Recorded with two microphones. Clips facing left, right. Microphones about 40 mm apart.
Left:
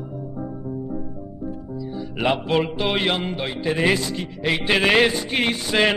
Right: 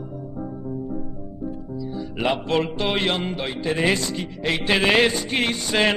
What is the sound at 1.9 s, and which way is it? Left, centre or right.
Speech, centre.